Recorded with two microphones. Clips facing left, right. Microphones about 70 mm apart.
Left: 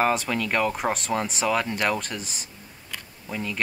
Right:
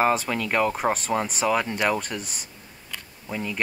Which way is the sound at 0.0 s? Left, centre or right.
Centre.